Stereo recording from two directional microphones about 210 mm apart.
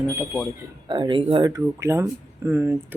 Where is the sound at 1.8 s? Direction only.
15° right (ahead or behind).